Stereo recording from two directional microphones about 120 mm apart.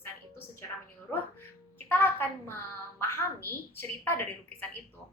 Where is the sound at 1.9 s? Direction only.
15° left (ahead or behind).